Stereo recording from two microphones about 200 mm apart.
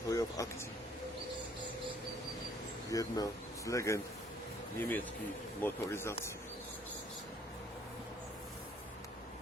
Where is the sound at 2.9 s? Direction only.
15° left (ahead or behind).